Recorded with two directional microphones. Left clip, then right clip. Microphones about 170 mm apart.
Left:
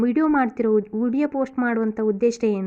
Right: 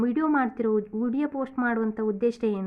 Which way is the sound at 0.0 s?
25° left (ahead or behind).